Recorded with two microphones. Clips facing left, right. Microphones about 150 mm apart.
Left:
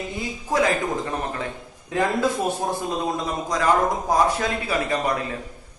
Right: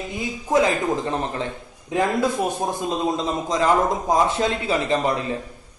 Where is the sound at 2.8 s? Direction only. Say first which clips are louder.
Right 2 dB; 20° right (ahead or behind).